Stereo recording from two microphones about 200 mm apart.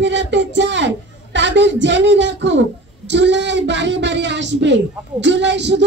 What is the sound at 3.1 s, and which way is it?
A woman's voice, 60° right (ahead or behind).